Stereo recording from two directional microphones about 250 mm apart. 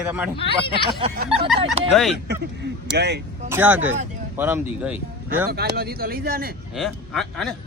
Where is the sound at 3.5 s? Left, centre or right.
Centre.